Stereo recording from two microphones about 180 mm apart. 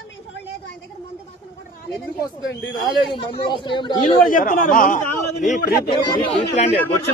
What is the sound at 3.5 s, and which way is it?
Speech, 25° left (ahead or behind).